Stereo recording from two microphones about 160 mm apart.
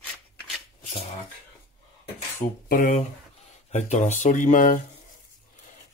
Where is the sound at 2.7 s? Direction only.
55° left (ahead or behind).